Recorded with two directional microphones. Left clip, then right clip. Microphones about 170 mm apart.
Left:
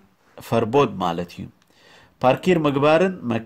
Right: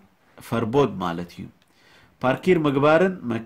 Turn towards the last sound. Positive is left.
turn(degrees=40)  # may be behind; listen again after turning